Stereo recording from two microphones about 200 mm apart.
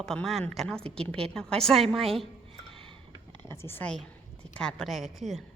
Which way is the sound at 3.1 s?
20° right (ahead or behind).